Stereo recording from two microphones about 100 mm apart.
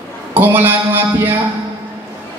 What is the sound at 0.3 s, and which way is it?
A man's voice, 20° right (ahead or behind).